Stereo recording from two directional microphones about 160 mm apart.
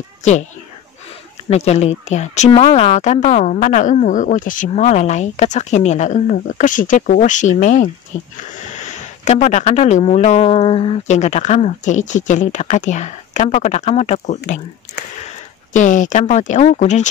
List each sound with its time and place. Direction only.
0.2 s a child's voice: 45° left (ahead or behind)
1.5 s speech: 40° left (ahead or behind)
2.5 s speech: 35° left (ahead or behind)